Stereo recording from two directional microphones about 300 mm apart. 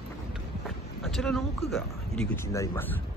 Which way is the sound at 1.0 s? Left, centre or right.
Centre.